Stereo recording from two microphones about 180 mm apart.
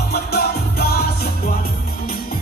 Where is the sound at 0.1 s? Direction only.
60° left (ahead or behind).